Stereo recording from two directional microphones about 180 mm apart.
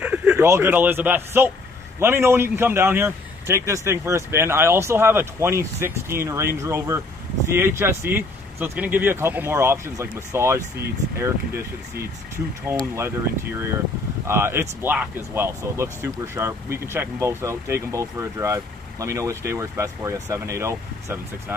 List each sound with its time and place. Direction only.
0.0 s a man's voice: 5° right (ahead or behind)
12.9 s a man's voice: 15° right (ahead or behind)